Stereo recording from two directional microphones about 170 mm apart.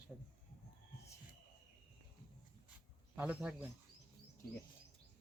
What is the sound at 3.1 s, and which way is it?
Speech, 10° right (ahead or behind).